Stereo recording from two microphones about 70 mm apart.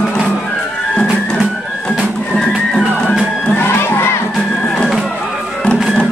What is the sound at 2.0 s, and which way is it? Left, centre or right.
Music, centre.